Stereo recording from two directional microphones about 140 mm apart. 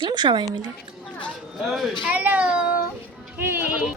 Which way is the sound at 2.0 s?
10° right (ahead or behind).